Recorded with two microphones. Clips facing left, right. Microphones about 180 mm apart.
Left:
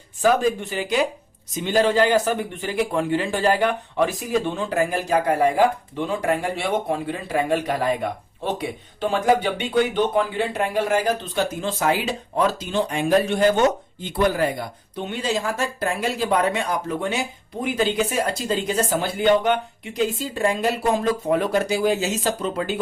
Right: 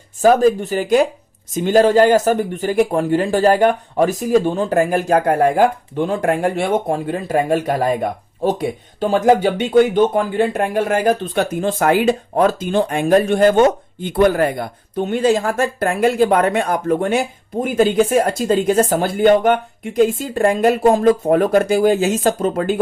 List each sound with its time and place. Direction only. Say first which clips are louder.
0.2 s speech: right 7 dB; 40° right (ahead or behind)